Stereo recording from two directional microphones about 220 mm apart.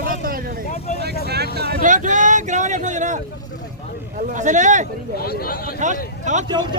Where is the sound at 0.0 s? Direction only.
40° right (ahead or behind).